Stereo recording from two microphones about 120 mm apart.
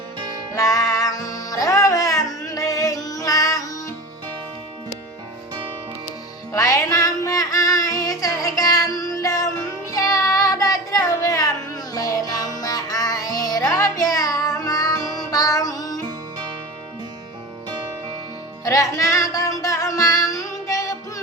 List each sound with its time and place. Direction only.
0.5 s music: 25° left (ahead or behind)
6.5 s music: 25° left (ahead or behind)
9.9 s child singing: 30° left (ahead or behind)
11.9 s music: 30° left (ahead or behind)
18.6 s music: 25° left (ahead or behind)